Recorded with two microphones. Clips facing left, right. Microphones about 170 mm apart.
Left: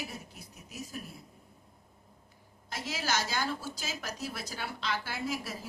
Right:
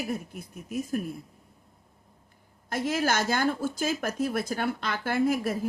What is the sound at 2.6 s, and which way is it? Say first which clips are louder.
Speech: right 9 dB; 55° right (ahead or behind).